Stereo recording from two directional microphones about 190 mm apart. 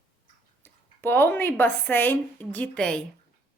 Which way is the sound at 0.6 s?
10° left (ahead or behind).